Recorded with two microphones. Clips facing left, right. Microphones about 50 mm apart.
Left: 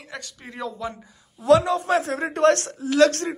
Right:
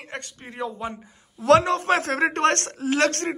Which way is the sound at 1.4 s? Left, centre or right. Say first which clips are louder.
Even; right.